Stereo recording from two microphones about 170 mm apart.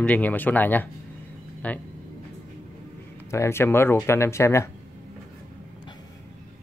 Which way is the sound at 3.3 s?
15° left (ahead or behind).